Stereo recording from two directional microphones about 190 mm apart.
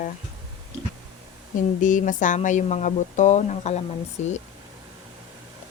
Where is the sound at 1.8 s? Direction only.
45° left (ahead or behind).